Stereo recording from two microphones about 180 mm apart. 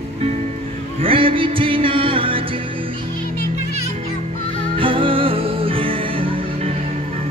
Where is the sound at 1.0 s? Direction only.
30° right (ahead or behind).